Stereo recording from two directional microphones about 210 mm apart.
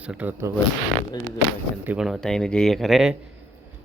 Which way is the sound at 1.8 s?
5° right (ahead or behind).